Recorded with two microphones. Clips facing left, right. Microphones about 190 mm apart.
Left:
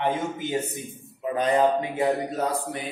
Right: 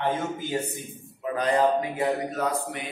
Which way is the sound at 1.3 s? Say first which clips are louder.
Left 1 dB; 25° left (ahead or behind).